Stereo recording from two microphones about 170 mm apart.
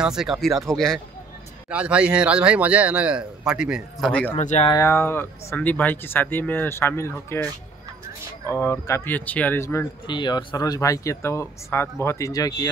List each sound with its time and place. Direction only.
0.0 s speech: 5° right (ahead or behind)
4.1 s speech: 10° left (ahead or behind)
4.4 s speech: 45° left (ahead or behind)
4.6 s speech: 15° left (ahead or behind)
10.0 s speech: 25° left (ahead or behind)